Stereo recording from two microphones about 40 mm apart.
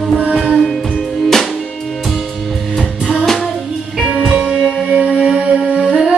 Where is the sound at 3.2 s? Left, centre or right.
Centre.